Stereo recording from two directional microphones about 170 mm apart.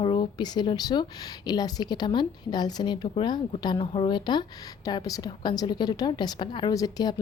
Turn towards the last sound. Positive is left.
turn(degrees=20)  # may be behind; listen again after turning